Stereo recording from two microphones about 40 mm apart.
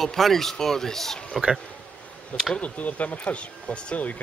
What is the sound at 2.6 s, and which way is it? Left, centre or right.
Speech, left.